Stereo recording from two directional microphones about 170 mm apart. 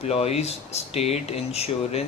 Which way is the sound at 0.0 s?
40° left (ahead or behind).